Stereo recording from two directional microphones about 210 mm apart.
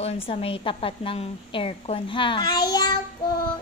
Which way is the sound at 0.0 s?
25° left (ahead or behind).